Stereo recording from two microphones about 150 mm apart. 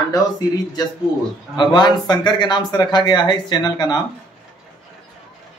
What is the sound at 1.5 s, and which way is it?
Speech, 30° left (ahead or behind).